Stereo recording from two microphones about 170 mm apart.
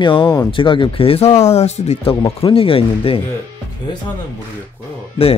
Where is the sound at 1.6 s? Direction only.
40° left (ahead or behind).